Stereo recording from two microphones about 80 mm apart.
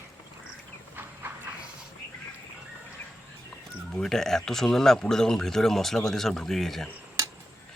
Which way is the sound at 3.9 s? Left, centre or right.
Centre.